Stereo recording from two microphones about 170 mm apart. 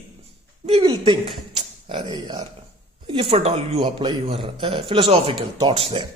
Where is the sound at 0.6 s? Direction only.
35° right (ahead or behind).